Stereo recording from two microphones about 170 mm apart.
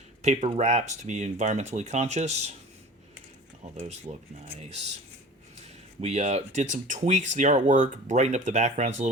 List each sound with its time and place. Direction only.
0.2 s speech: 40° right (ahead or behind)
3.6 s speech: 40° right (ahead or behind)